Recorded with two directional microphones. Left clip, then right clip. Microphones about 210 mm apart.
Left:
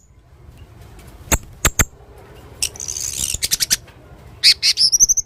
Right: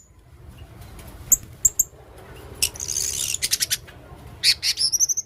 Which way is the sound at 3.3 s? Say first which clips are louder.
Left 6 dB; 20° left (ahead or behind).